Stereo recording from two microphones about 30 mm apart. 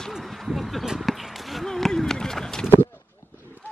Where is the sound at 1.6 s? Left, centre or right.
Centre.